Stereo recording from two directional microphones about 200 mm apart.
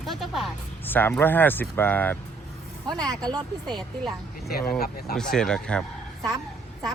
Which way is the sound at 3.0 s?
20° right (ahead or behind).